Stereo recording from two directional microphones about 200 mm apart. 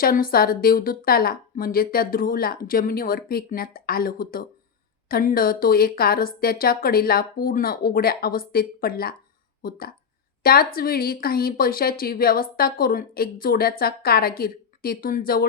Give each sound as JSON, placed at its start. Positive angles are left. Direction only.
{"t": 0.0, "sound": "speech", "side_deg": 45}